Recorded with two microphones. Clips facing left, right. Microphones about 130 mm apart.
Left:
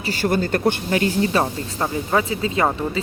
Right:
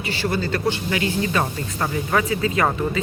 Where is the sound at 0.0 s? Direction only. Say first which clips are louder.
Left 3 dB; 45° left (ahead or behind).